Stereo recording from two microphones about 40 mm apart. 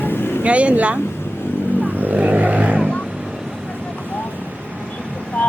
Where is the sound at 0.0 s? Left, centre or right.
Left.